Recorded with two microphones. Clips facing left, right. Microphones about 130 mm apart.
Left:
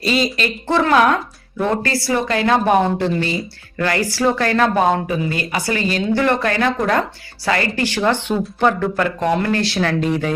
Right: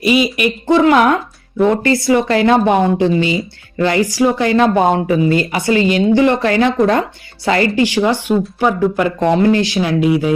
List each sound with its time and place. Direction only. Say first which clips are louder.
0.0 s speech: right 5 dB; 15° right (ahead or behind)
9.0 s speech: right 6 dB; 25° right (ahead or behind)